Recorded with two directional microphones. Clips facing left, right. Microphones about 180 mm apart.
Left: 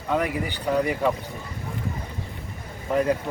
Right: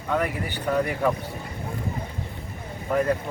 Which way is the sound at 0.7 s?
5° left (ahead or behind).